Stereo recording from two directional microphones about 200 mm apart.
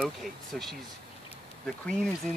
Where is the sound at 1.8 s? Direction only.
Centre (ahead or behind).